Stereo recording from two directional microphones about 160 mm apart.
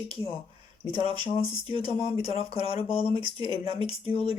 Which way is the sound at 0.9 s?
30° right (ahead or behind).